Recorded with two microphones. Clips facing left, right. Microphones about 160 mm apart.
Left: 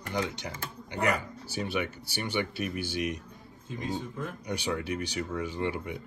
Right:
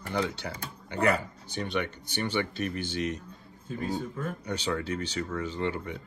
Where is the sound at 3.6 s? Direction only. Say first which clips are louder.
Right 2 dB; 40° right (ahead or behind).